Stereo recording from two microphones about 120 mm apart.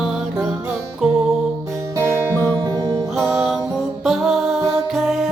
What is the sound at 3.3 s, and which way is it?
Music, 5° right (ahead or behind).